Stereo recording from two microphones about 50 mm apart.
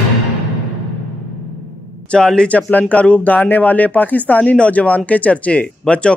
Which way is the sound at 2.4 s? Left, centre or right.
Left.